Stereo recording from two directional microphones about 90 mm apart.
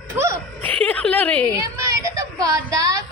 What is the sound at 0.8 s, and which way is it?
Speech, 15° left (ahead or behind).